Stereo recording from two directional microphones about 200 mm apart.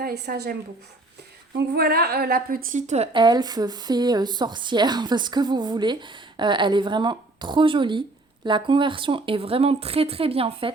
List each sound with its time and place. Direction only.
0.0 s speech: 50° right (ahead or behind)
1.5 s a woman's voice: 50° right (ahead or behind); by 10.7 s 30° right (ahead or behind)